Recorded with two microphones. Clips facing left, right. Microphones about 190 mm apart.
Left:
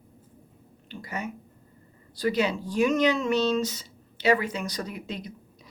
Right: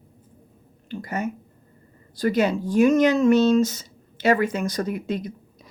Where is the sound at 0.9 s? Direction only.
50° right (ahead or behind).